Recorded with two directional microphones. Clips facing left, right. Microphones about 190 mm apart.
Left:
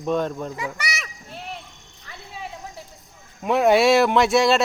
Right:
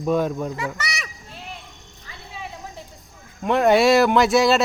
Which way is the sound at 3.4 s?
Centre (ahead or behind).